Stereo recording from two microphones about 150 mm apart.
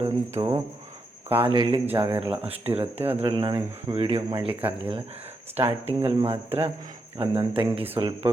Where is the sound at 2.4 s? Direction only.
40° right (ahead or behind).